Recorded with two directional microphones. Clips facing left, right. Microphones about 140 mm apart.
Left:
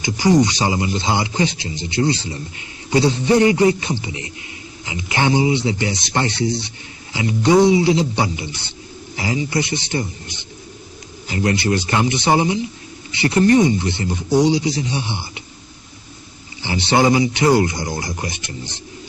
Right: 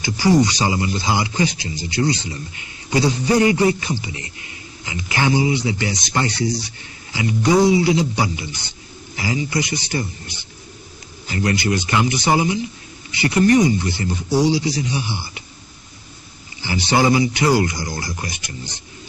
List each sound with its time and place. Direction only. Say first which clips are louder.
0.0 s speech: left 1 dB; 20° left (ahead or behind)
11.4 s speech: left 2 dB; 30° left (ahead or behind)
16.6 s speech: left 1 dB; 25° left (ahead or behind)